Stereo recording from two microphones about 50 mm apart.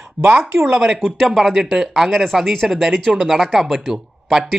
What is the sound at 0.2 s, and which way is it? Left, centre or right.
Speech, centre.